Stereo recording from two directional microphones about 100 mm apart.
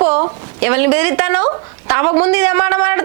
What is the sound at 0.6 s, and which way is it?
A woman's voice, 20° right (ahead or behind).